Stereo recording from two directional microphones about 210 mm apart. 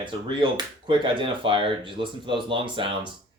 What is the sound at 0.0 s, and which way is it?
Speech, 25° right (ahead or behind).